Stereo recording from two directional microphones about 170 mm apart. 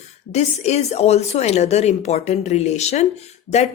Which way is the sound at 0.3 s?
40° left (ahead or behind).